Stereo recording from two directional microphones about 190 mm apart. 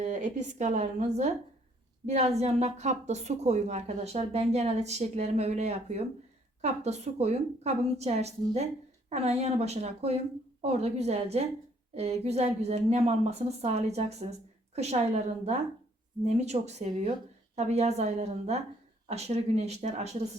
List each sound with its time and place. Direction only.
0.0 s a woman's voice: 40° right (ahead or behind)